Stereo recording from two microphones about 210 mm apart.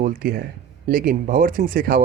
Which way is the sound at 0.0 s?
40° right (ahead or behind).